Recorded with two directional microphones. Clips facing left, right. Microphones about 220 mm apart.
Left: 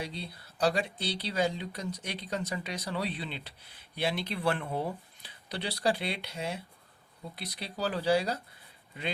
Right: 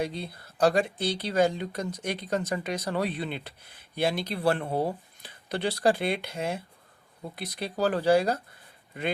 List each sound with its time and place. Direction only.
0.0 s speech: 50° right (ahead or behind)